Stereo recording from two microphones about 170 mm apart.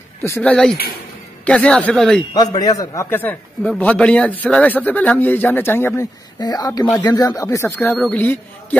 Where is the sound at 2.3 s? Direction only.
25° left (ahead or behind).